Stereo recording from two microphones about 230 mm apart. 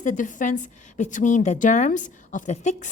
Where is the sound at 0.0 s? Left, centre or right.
Left.